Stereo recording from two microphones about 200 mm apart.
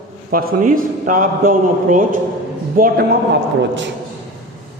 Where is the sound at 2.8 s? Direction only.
55° right (ahead or behind).